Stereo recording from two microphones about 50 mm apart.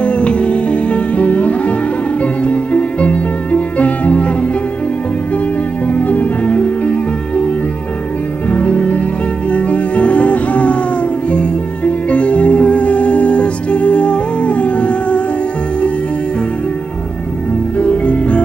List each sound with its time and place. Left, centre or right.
0.0 s music: left
5.9 s music: left
17.7 s music: left